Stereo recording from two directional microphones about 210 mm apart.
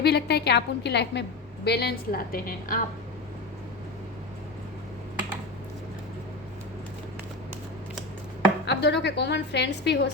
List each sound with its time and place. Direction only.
0.0 s a woman's voice: 50° left (ahead or behind)
8.6 s a woman's voice: 55° left (ahead or behind)